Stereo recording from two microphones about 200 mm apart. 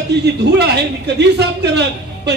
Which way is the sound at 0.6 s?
55° right (ahead or behind).